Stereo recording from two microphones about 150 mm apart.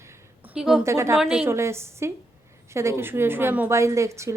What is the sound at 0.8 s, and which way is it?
Speech, 20° right (ahead or behind).